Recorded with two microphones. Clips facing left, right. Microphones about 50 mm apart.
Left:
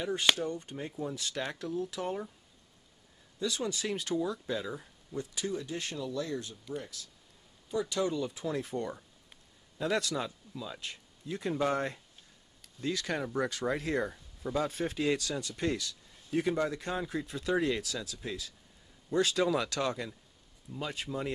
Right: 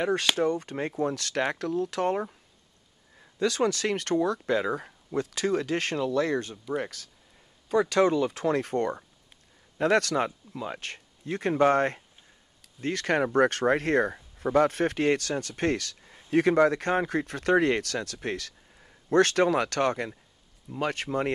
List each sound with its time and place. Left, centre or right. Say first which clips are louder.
0.0 s speech: right 5 dB; right
20.7 s speech: right 8 dB; right